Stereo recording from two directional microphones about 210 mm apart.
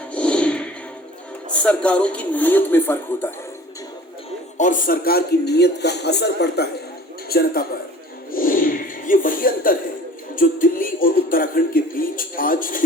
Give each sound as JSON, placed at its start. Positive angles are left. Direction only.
{"t": 0.1, "sound": "whip", "side_deg": 5}
{"t": 1.5, "sound": "speech", "side_deg": 5}
{"t": 4.5, "sound": "speech", "side_deg": 35}
{"t": 8.3, "sound": "a sound", "side_deg": 40}
{"t": 10.3, "sound": "speech", "side_deg": 40}